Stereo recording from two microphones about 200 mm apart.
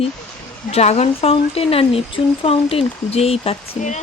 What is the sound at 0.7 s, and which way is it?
A woman's voice, 30° left (ahead or behind).